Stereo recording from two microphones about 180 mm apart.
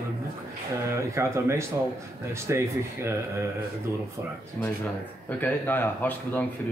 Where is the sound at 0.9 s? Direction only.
15° right (ahead or behind).